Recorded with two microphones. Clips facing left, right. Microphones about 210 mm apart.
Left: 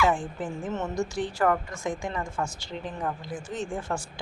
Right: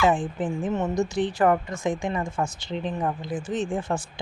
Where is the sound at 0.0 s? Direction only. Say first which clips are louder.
Right 3 dB; 20° right (ahead or behind).